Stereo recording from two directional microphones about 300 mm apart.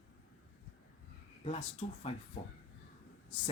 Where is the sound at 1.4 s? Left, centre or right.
Centre.